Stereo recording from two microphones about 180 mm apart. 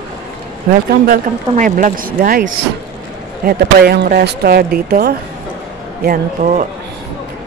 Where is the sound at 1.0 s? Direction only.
50° right (ahead or behind).